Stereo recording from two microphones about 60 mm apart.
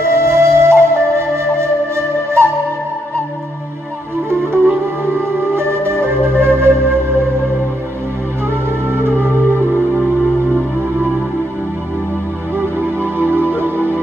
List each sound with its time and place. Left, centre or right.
0.2 s flute: right
4.3 s music: right
8.9 s music: right
12.5 s music: right